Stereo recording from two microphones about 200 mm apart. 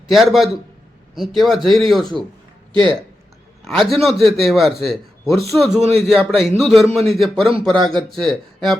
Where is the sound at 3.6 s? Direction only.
Centre (ahead or behind).